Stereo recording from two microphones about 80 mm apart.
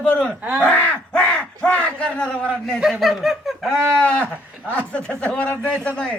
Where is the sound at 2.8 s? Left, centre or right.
Centre.